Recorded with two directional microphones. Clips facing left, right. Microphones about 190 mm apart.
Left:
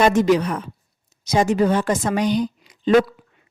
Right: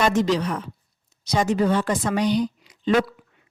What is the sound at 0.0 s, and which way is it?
A woman's voice, 55° left (ahead or behind).